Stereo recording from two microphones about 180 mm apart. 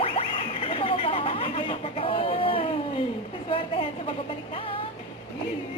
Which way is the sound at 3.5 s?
30° left (ahead or behind).